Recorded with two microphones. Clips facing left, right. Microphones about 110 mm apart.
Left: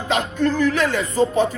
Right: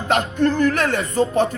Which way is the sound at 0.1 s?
55° right (ahead or behind).